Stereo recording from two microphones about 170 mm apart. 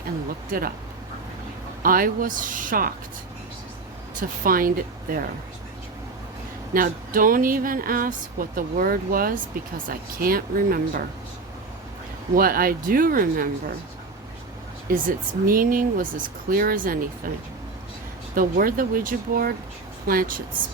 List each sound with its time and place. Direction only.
0.5 s speech: 55° right (ahead or behind)
1.8 s speech: 55° right (ahead or behind)
4.2 s speech: 55° right (ahead or behind)
6.7 s speech: 55° right (ahead or behind)
12.4 s speech: 60° right (ahead or behind)
14.8 s speech: 55° right (ahead or behind)
18.3 s speech: 55° right (ahead or behind)